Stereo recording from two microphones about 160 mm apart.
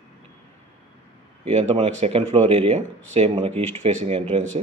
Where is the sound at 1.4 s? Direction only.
40° right (ahead or behind).